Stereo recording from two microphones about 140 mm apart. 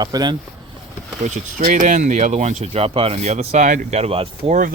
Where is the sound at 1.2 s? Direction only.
75° right (ahead or behind); by 4.6 s 40° right (ahead or behind).